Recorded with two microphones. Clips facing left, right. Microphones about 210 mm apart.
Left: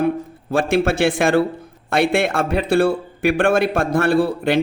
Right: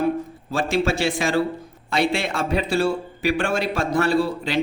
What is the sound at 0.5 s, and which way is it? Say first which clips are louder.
Speech: left 4 dB; 55° left (ahead or behind).